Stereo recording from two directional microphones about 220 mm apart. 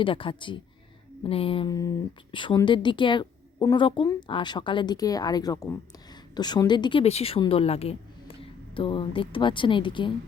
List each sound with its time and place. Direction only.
0.0 s a woman's voice: 25° left (ahead or behind)